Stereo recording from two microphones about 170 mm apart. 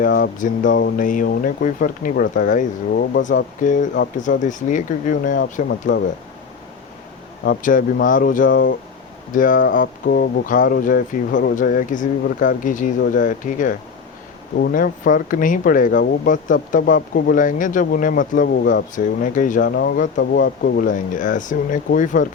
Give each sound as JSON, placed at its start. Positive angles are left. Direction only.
{"t": 0.0, "sound": "speech", "side_deg": 60}
{"t": 7.4, "sound": "speech", "side_deg": 60}